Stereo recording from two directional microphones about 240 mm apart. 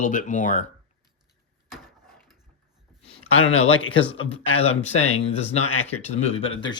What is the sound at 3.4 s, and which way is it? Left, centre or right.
Speech, left.